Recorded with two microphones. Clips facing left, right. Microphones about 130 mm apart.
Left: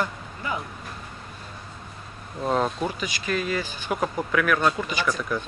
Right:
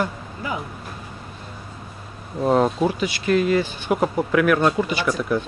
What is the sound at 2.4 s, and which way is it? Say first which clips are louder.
Speech: right 6 dB; 25° right (ahead or behind).